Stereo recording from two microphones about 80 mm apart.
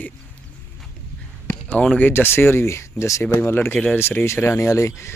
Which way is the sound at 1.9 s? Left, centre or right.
Left.